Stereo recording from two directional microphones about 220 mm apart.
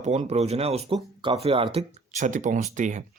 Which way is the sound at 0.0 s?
30° right (ahead or behind).